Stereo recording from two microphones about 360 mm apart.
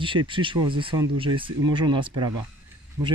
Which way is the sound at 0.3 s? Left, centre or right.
Centre.